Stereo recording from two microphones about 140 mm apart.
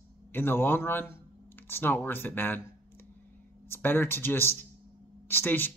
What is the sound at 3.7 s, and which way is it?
Speech, 15° left (ahead or behind).